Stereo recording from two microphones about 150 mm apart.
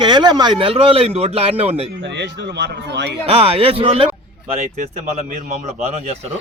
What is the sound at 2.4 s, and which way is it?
Speech, 90° right.